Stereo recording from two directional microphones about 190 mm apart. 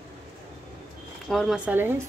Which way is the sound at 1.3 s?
Centre (ahead or behind).